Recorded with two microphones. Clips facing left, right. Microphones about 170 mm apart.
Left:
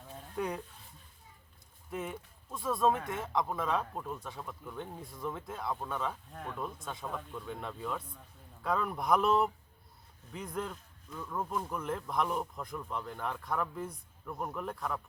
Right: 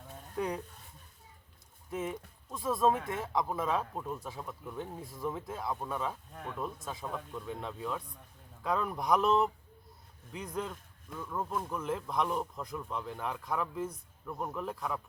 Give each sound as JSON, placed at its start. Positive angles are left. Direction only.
{"t": 0.3, "sound": "speech", "side_deg": 0}
{"t": 1.9, "sound": "speech", "side_deg": 0}